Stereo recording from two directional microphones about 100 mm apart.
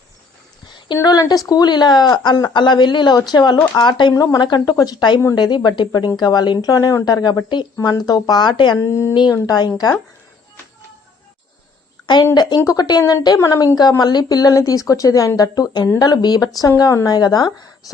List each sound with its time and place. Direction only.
1.0 s speech: 40° left (ahead or behind)
4.1 s speech: 40° left (ahead or behind)
8.8 s speech: 30° left (ahead or behind)
12.0 s speech: 45° left (ahead or behind)
13.0 s speech: 30° left (ahead or behind)